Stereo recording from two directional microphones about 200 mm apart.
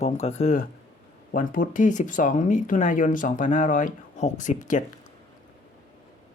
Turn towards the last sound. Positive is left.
turn(degrees=40)  # may be behind; listen again after turning